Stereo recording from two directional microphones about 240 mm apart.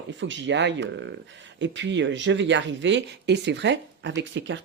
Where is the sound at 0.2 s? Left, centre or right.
Right.